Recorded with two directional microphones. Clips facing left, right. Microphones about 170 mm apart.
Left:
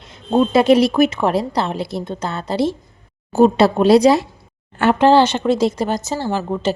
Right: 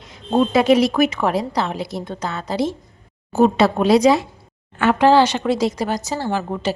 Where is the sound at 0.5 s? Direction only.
30° left (ahead or behind).